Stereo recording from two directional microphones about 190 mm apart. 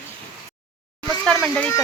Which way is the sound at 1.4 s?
Centre (ahead or behind).